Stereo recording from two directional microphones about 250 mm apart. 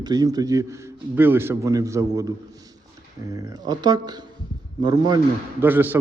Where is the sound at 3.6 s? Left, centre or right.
Centre.